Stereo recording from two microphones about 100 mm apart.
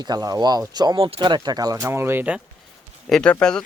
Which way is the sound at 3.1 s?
10° left (ahead or behind).